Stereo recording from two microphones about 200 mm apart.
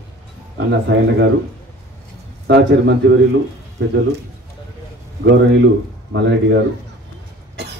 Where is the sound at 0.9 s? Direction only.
60° right (ahead or behind).